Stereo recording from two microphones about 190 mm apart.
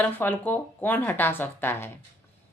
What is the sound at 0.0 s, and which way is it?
A woman's voice, 10° left (ahead or behind).